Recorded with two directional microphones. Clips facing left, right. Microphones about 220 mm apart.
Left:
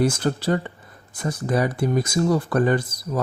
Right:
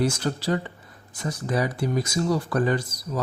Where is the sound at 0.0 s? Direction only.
55° left (ahead or behind).